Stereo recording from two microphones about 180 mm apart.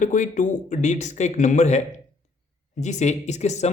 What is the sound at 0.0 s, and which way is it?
Speech, 45° left (ahead or behind).